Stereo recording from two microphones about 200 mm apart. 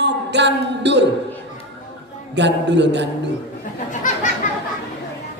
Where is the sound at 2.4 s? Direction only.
60° right (ahead or behind).